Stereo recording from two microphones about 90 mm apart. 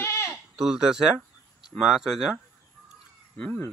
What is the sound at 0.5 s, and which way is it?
Speech, 5° right (ahead or behind).